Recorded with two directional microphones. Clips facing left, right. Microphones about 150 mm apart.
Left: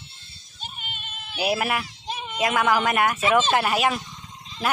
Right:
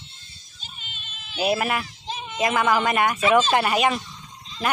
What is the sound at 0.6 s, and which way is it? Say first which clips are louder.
Music: left 6 dB; 55° left (ahead or behind).